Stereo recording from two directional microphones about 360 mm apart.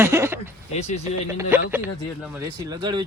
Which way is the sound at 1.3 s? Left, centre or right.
Centre.